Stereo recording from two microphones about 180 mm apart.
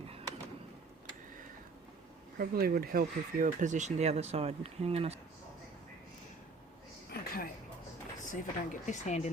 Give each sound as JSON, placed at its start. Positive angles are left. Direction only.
{"t": 2.4, "sound": "speech", "side_deg": -55}
{"t": 7.1, "sound": "a sound", "side_deg": 55}
{"t": 8.2, "sound": "speech", "side_deg": 45}